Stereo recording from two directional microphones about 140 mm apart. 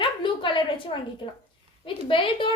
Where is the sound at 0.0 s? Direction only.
35° left (ahead or behind).